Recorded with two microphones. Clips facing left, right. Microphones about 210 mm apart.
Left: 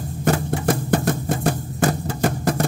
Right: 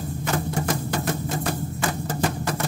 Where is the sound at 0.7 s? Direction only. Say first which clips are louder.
Left 6 dB; 50° left (ahead or behind).